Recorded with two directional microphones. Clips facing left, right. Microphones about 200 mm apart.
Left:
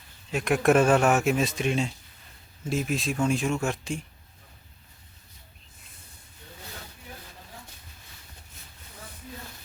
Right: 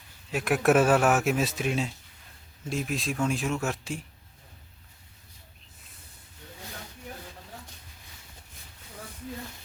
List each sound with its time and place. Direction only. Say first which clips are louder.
0.3 s speech: left 1 dB; 5° right (ahead or behind)